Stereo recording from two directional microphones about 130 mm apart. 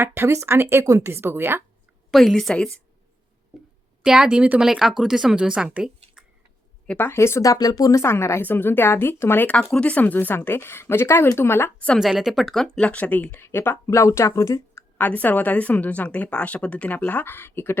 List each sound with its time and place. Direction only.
0.0 s speech: 20° right (ahead or behind)
2.0 s speech: centre (ahead or behind)
3.5 s a sound: 5° right (ahead or behind)
4.0 s speech: 5° right (ahead or behind)
6.8 s speech: 15° left (ahead or behind)
11.9 s speech: 5° right (ahead or behind); by 17.7 s 15° left (ahead or behind)